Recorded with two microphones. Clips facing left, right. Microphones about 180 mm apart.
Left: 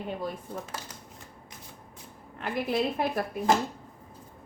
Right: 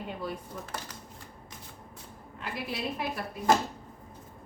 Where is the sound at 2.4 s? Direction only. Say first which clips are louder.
Left 7 dB; 55° left (ahead or behind).